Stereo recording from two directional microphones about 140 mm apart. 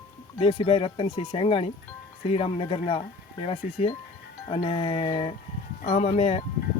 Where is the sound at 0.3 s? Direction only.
40° left (ahead or behind).